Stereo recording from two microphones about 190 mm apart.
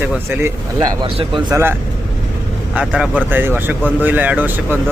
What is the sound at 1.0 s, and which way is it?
Speech, 25° right (ahead or behind).